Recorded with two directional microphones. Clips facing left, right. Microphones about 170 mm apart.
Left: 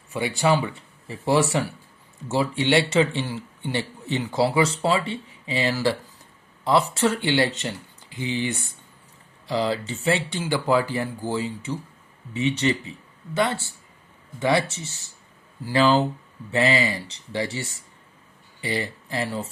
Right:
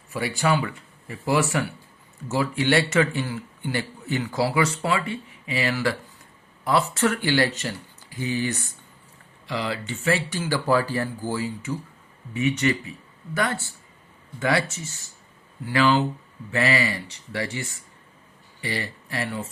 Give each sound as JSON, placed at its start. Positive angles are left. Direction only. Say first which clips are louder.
{"t": 0.1, "sound": "a man's voice", "louder": "left 2 dB", "side_deg": 25}
{"t": 9.5, "sound": "a man's voice", "louder": "left 4 dB", "side_deg": 30}
{"t": 15.6, "sound": "a man's voice", "louder": "left 1 dB", "side_deg": 30}